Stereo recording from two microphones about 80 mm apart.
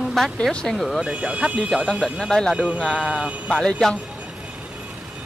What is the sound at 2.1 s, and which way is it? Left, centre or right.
Speech, centre.